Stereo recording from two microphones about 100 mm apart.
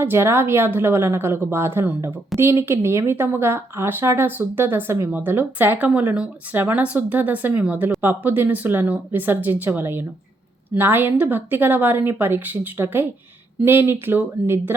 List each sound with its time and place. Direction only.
0.0 s speech: 25° right (ahead or behind)